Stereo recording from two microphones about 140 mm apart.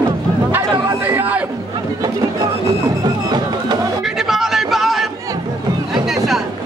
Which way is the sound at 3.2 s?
30° right (ahead or behind).